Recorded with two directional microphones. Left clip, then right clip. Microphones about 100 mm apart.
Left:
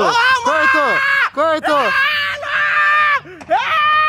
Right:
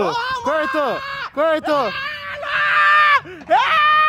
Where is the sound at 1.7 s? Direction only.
25° right (ahead or behind).